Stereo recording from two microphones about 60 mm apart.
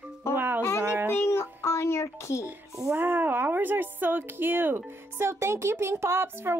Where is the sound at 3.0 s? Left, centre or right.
Right.